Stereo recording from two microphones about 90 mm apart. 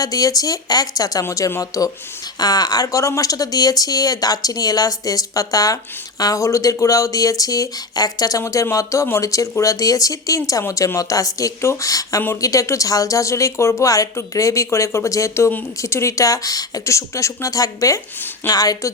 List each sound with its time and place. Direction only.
0.0 s speech: 40° left (ahead or behind)
2.4 s speech: 45° left (ahead or behind)